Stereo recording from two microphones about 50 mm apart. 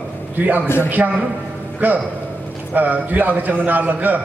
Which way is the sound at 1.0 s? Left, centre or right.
Right.